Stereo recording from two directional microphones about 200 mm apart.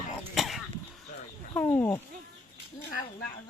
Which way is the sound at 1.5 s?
10° left (ahead or behind).